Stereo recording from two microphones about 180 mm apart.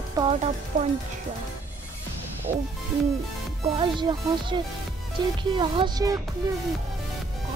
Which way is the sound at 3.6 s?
30° right (ahead or behind).